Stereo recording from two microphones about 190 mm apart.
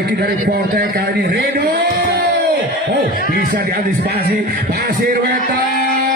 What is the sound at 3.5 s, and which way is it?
Music, 55° right (ahead or behind).